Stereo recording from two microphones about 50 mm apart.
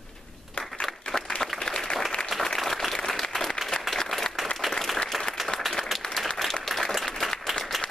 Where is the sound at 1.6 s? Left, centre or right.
Centre.